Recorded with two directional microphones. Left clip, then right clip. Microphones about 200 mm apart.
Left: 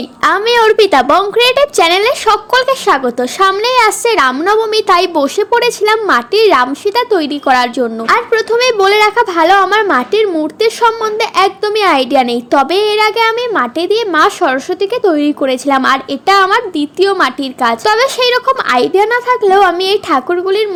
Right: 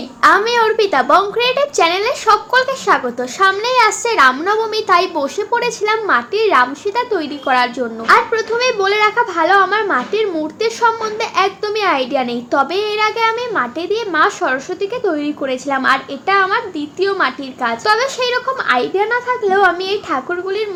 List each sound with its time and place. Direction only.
0.2 s a woman's voice: 40° left (ahead or behind)